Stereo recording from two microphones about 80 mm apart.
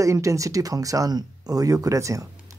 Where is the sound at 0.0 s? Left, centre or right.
Right.